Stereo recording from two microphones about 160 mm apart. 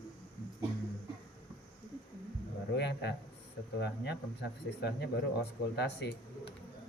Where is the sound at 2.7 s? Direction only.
90° left.